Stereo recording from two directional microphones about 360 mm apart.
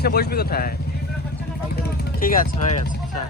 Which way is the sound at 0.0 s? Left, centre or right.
Left.